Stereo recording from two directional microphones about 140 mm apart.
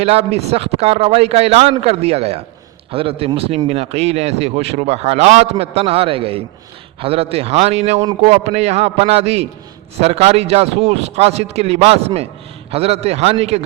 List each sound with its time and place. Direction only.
0.0 s speech: 45° right (ahead or behind)